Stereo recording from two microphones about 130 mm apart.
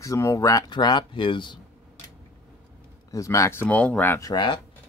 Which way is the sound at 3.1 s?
25° left (ahead or behind).